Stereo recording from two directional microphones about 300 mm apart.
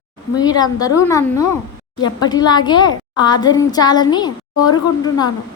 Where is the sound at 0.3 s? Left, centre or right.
Centre.